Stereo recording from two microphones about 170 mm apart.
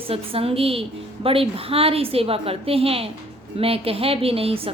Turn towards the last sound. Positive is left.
turn(degrees=-35)  # may be behind; listen again after turning